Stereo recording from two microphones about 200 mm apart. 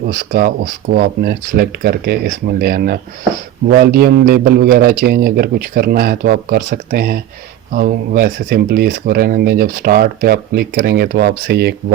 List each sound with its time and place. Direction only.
0.1 s speech: 45° right (ahead or behind)